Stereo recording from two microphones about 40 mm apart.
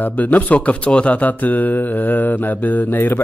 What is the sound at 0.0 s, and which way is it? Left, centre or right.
Speech, left.